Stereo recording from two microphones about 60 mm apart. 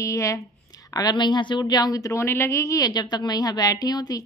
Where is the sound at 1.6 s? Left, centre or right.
Left.